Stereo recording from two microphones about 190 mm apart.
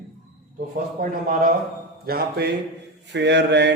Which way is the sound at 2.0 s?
55° right (ahead or behind).